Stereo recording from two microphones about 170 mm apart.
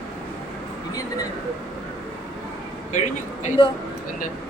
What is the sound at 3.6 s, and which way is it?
Speech, 25° left (ahead or behind).